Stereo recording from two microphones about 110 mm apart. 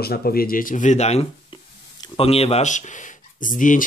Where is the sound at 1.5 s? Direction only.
50° left (ahead or behind).